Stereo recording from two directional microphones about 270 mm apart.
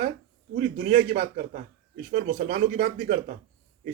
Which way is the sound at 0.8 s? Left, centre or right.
Right.